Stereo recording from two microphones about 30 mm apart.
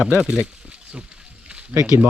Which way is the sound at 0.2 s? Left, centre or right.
Right.